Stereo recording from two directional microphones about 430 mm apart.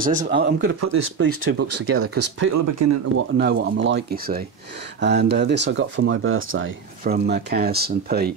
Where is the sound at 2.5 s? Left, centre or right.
Right.